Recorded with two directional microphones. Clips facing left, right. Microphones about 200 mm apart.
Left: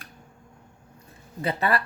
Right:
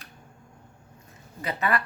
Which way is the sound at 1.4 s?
35° left (ahead or behind).